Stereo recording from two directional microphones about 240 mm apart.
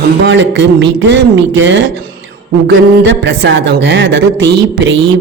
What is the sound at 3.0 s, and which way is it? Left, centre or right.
Speech, right.